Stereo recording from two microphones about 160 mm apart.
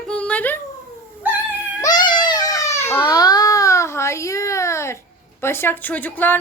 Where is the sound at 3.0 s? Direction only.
25° left (ahead or behind).